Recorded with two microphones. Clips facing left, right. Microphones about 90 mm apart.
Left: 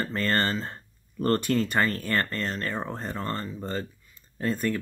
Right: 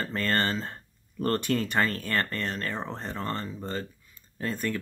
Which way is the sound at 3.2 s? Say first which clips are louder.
Left 1 dB; 5° right (ahead or behind).